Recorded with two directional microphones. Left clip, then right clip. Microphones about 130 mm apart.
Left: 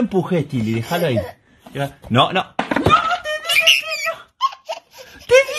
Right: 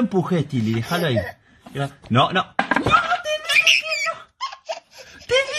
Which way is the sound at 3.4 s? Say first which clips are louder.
Left 2 dB; 15° right (ahead or behind).